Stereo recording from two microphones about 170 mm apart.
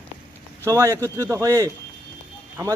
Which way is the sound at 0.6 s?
20° right (ahead or behind).